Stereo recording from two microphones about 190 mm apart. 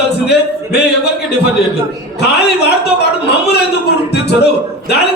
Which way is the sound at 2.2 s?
60° left (ahead or behind).